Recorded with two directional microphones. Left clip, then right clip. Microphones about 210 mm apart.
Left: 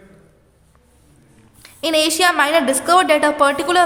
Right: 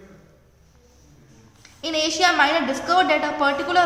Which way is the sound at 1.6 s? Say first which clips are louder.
Left 7 dB; 55° left (ahead or behind).